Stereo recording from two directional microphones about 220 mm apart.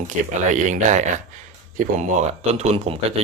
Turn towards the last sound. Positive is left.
turn(degrees=-30)  # may be behind; listen again after turning